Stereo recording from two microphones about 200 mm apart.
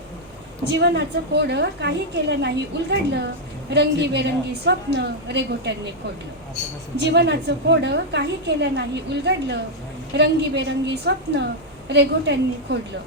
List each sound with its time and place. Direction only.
0.7 s a woman's voice: 60° right (ahead or behind)
7.0 s a woman's voice: 60° right (ahead or behind)